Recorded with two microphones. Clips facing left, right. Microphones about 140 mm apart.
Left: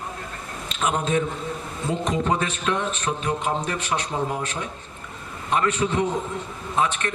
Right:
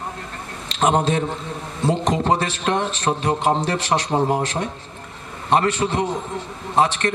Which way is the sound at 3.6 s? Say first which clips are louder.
Right 5 dB; 90° right.